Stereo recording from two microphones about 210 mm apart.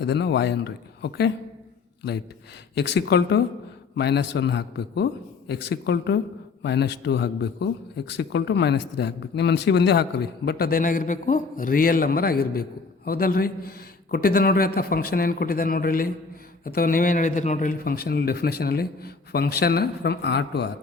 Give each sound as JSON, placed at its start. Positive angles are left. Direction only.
{"t": 0.0, "sound": "a man's voice", "side_deg": 55}
{"t": 2.7, "sound": "a man's voice", "side_deg": 55}